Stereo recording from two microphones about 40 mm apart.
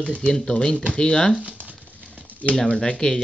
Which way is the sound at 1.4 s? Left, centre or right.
Right.